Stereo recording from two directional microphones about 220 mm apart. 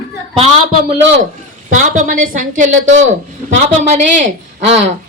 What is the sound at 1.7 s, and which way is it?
A woman's voice, 35° right (ahead or behind).